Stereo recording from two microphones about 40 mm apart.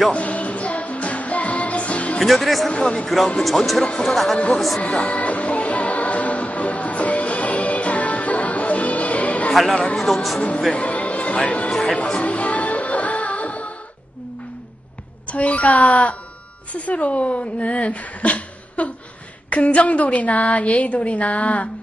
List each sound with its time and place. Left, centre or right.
0.1 s music: left
2.2 s speech: centre
2.7 s a man's voice: left
3.3 s speech: centre
4.8 s music: left
9.7 s a man's voice: left
9.9 s speech: centre
10.7 s speech: left
12.2 s music: left
15.2 s a woman's voice: left